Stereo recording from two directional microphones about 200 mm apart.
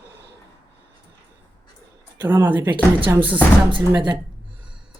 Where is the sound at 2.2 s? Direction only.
10° right (ahead or behind).